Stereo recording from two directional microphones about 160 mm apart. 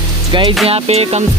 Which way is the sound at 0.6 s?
40° right (ahead or behind).